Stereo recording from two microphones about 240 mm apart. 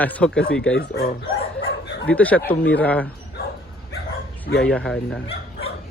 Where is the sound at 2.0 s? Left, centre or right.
Centre.